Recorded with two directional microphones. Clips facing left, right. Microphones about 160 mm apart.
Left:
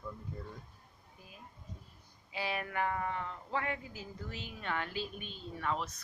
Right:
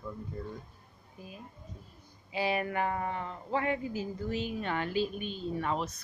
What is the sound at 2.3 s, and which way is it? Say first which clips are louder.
Speech: right 7 dB; 15° right (ahead or behind).